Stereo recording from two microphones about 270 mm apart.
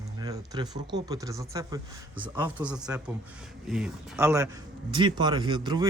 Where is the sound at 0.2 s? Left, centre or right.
Centre.